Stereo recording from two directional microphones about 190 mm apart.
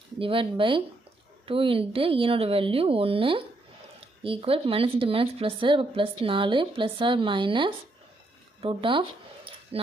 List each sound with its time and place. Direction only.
0.2 s speech: 30° right (ahead or behind)
8.6 s zipper: 25° right (ahead or behind)